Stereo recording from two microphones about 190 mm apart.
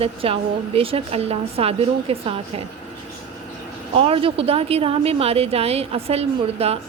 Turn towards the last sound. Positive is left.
turn(degrees=-30)  # may be behind; listen again after turning